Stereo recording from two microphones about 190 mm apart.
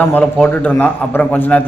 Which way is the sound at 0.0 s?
5° left (ahead or behind).